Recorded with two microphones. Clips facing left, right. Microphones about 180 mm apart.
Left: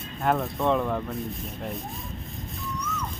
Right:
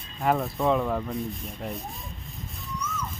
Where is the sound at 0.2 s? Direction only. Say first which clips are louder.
Even; centre (ahead or behind).